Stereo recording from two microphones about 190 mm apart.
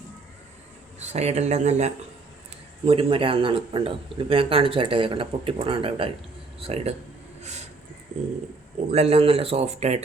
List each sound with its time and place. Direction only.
0.9 s a man's voice: 35° right (ahead or behind)
8.1 s bird: 35° right (ahead or behind)
8.9 s speech: 35° right (ahead or behind)